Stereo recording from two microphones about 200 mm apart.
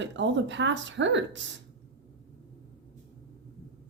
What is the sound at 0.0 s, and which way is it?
Speech, 65° right (ahead or behind).